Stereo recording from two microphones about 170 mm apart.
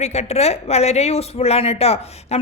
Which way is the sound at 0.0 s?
40° left (ahead or behind).